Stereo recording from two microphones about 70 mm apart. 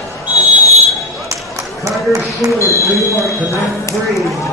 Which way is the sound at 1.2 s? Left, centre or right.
Right.